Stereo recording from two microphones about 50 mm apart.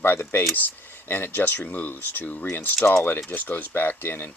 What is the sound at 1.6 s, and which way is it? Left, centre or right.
Speech, left.